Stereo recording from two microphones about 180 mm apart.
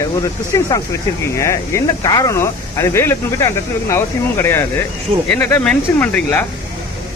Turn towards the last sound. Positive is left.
turn(degrees=10)  # may be behind; listen again after turning